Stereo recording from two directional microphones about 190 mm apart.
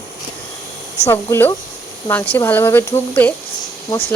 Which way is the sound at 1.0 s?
15° left (ahead or behind).